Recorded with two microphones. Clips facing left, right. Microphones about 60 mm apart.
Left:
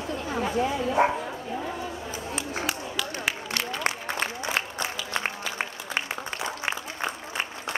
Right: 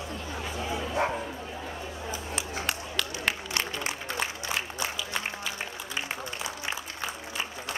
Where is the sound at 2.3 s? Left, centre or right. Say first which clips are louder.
Left 3 dB; centre.